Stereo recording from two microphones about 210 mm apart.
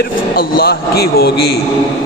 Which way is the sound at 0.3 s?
45° left (ahead or behind).